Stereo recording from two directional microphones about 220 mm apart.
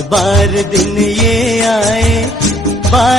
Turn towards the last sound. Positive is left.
turn(degrees=0)  # may be behind; listen again after turning